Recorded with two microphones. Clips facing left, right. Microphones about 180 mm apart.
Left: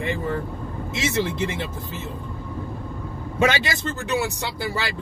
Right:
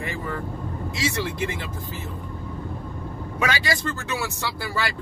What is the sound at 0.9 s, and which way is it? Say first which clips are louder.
Speech: left 4 dB; 20° left (ahead or behind).